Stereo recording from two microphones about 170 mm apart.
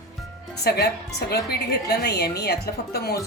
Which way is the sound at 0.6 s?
75° left (ahead or behind).